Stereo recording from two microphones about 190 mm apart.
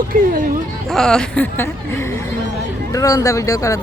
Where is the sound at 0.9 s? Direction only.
5° left (ahead or behind).